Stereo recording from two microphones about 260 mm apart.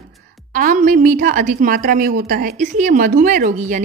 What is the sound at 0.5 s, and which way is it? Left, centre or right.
A woman's voice, right.